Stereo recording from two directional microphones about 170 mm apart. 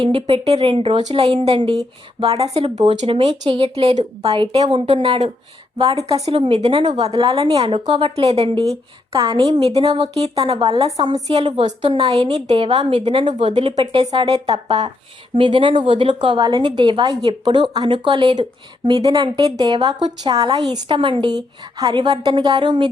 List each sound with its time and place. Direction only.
0.0 s a woman's voice: 30° right (ahead or behind)
6.0 s a woman's voice: 20° right (ahead or behind)
6.2 s a woman's voice: 30° right (ahead or behind)
9.1 s a woman's voice: 25° right (ahead or behind)
9.9 s a woman's voice: 35° right (ahead or behind)
11.0 s a woman's voice: 25° right (ahead or behind)
11.6 s a woman's voice: 40° right (ahead or behind)
13.7 s a woman's voice: 25° right (ahead or behind)